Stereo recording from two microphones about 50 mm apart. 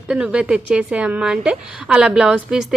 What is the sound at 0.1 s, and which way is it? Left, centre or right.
A woman's voice, right.